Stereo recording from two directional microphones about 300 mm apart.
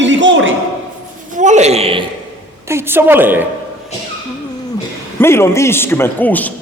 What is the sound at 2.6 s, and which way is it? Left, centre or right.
Speech, centre.